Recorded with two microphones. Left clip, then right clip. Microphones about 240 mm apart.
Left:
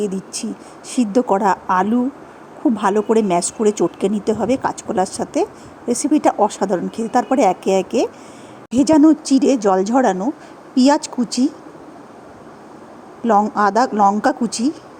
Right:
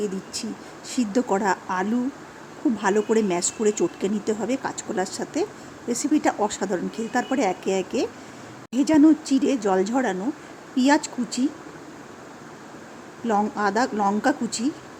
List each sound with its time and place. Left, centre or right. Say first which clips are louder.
0.0 s a woman's voice: left 5 dB; centre
13.2 s a woman's voice: left 8 dB; centre